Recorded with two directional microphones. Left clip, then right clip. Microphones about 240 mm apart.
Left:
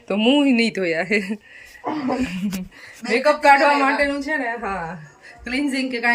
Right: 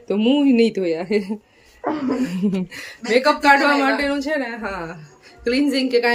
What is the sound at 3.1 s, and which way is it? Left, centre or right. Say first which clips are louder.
Speech: even; centre.